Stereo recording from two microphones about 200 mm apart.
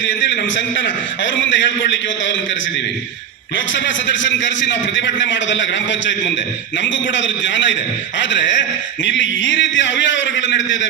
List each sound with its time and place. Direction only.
0.0 s a man's voice: 65° left (ahead or behind)
3.7 s a man's voice: 65° left (ahead or behind)